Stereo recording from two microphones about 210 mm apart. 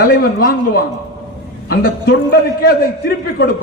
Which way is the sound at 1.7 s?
45° left (ahead or behind).